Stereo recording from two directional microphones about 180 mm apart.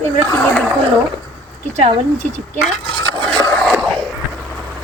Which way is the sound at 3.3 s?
5° left (ahead or behind).